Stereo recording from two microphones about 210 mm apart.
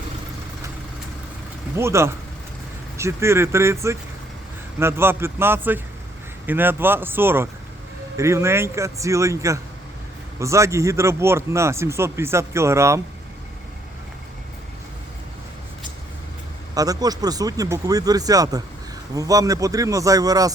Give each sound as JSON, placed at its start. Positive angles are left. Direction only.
{"t": 1.7, "sound": "speech", "side_deg": -15}
{"t": 16.7, "sound": "speech", "side_deg": -15}